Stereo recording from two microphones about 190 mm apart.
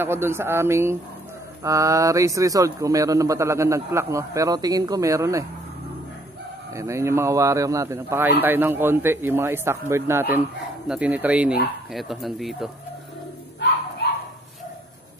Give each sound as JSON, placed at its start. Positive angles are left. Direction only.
{"t": 0.0, "sound": "a man's voice", "side_deg": -10}
{"t": 6.7, "sound": "a man's voice", "side_deg": -15}